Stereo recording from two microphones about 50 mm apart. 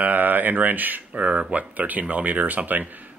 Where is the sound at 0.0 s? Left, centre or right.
Right.